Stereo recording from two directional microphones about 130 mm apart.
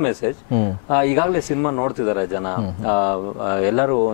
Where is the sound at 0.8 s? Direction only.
15° left (ahead or behind).